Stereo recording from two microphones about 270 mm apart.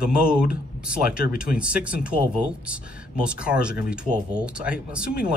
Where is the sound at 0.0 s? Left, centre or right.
Centre.